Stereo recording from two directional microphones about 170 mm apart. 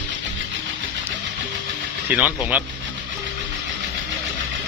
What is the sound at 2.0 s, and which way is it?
Speech, 10° right (ahead or behind).